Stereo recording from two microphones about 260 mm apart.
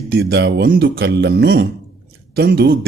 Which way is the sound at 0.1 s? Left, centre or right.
Right.